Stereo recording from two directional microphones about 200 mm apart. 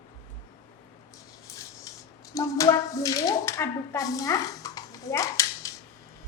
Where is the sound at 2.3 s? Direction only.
15° left (ahead or behind).